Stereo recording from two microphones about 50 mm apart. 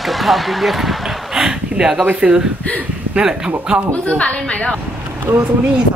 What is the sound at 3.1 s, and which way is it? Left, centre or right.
Speech, centre.